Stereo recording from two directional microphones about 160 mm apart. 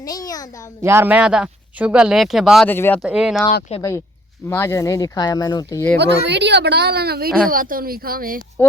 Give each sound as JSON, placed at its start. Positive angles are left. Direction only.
{"t": 0.0, "sound": "speech", "side_deg": 20}
{"t": 0.8, "sound": "speech", "side_deg": -15}
{"t": 2.6, "sound": "speech", "side_deg": 15}
{"t": 3.0, "sound": "speech", "side_deg": -5}
{"t": 3.8, "sound": "speech", "side_deg": 20}
{"t": 6.0, "sound": "speech", "side_deg": -90}
{"t": 7.5, "sound": "a woman's voice", "side_deg": -60}